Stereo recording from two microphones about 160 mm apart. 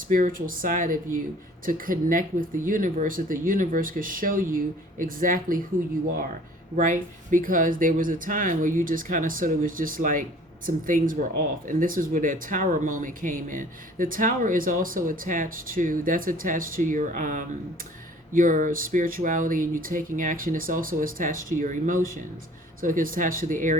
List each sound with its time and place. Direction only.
0.1 s speech: 60° right (ahead or behind)
6.7 s speech: 55° right (ahead or behind)